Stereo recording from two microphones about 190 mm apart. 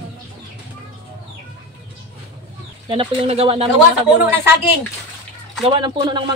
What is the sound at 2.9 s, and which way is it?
Speech, 30° right (ahead or behind).